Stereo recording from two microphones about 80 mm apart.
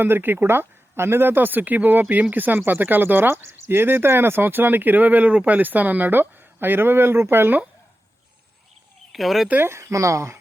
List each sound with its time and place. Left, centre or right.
0.0 s speech: right
9.1 s speech: centre
9.5 s speech: right